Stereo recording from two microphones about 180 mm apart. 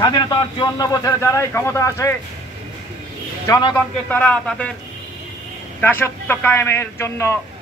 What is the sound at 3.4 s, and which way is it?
Speech, 20° left (ahead or behind).